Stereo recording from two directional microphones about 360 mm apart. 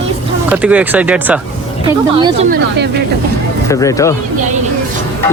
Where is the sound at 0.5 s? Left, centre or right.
Centre.